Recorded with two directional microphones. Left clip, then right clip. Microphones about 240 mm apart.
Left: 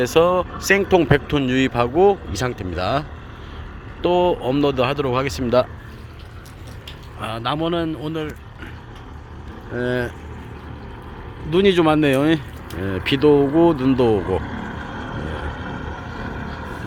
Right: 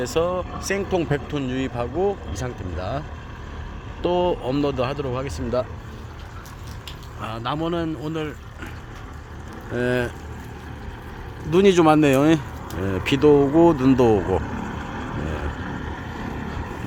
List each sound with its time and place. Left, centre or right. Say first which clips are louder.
0.0 s speech: left 7 dB; centre
4.0 s speech: left 4 dB; centre
7.2 s speech: left 4 dB; centre
9.7 s speech: even; centre
11.5 s speech: even; centre
14.4 s vehicle: left 1 dB; centre